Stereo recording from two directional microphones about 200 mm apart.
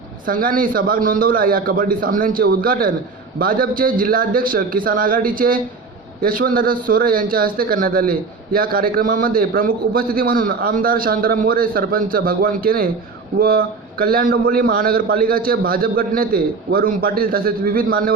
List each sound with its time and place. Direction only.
0.3 s a man's voice: 45° right (ahead or behind)